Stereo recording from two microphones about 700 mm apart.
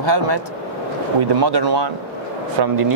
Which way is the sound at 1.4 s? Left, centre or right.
Right.